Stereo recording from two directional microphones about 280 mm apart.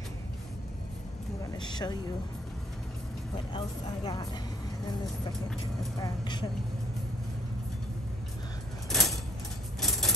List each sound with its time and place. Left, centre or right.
1.6 s speech: centre
3.5 s speech: centre
5.9 s speech: centre
8.8 s a sound: centre